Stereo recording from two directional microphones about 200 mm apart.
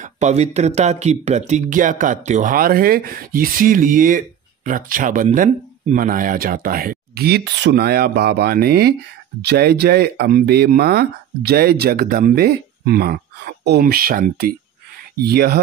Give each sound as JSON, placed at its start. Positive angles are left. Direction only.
{"t": 0.0, "sound": "speech", "side_deg": -35}